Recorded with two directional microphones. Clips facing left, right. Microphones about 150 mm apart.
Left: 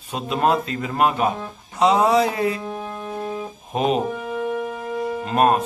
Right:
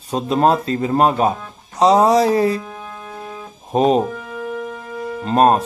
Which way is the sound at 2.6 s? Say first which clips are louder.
Left 3 dB; 30° left (ahead or behind).